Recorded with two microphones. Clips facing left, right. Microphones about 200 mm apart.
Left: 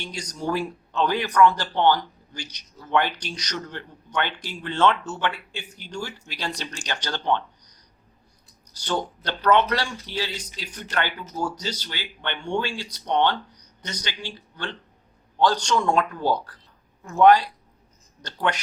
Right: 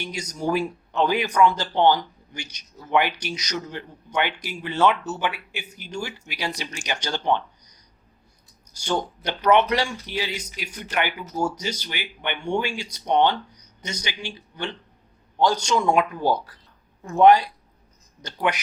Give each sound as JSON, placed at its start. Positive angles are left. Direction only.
{"t": 0.0, "sound": "speech", "side_deg": -10}
{"t": 8.8, "sound": "speech", "side_deg": -15}
{"t": 17.0, "sound": "speech", "side_deg": -25}